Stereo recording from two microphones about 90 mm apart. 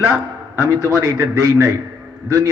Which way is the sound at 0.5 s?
35° right (ahead or behind).